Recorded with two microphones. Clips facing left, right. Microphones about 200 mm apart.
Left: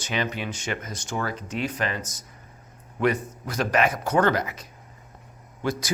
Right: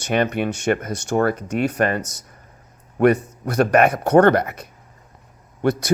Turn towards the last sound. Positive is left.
turn(degrees=-60)  # may be behind; listen again after turning